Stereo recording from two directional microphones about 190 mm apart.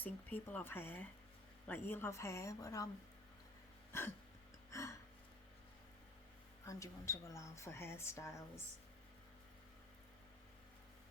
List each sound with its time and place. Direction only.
0.0 s speech: 10° left (ahead or behind)
4.7 s a sound: 15° left (ahead or behind)
6.7 s speech: 15° left (ahead or behind)